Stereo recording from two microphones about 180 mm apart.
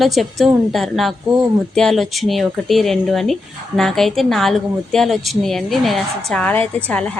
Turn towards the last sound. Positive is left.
turn(degrees=5)  # may be behind; listen again after turning